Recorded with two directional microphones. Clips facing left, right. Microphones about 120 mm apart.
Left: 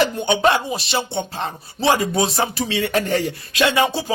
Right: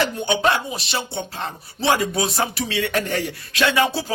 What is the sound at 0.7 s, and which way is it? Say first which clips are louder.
Speech: left 4 dB; 25° left (ahead or behind).